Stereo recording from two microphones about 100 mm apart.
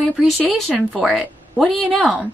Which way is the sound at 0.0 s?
15° right (ahead or behind).